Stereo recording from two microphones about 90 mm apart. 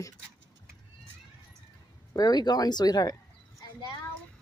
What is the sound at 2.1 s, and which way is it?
A woman's voice, 50° left (ahead or behind).